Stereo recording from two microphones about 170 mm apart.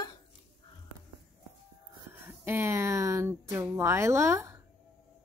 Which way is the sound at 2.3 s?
15° right (ahead or behind).